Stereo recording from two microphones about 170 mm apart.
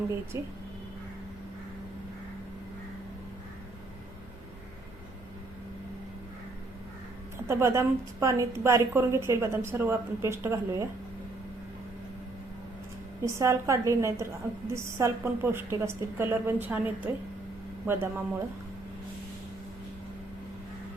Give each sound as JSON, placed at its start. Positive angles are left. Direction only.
{"t": 0.3, "sound": "a woman's voice", "side_deg": -15}
{"t": 7.4, "sound": "a woman's voice", "side_deg": -15}
{"t": 13.2, "sound": "a woman's voice", "side_deg": -15}